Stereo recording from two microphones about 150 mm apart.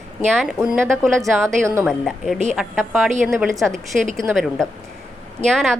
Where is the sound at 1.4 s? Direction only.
20° right (ahead or behind).